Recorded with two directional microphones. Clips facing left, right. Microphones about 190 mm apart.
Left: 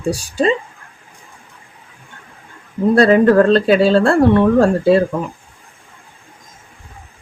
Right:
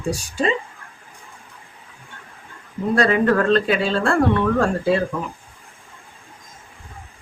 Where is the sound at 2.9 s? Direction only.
35° left (ahead or behind).